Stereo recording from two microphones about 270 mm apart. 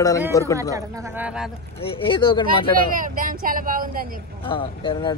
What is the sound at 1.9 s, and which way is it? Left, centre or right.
Speech, centre.